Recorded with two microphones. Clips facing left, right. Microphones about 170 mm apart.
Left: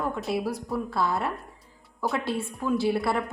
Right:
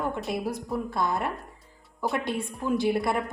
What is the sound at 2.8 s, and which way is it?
Speech, 15° right (ahead or behind).